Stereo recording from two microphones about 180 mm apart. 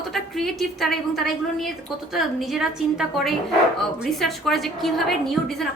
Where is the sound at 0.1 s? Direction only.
Centre (ahead or behind).